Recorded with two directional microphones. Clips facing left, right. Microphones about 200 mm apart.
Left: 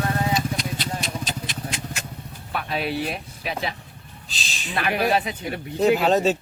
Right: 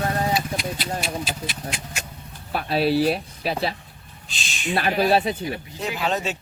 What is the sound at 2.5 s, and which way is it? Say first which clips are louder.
Speech: right 6 dB; 35° right (ahead or behind).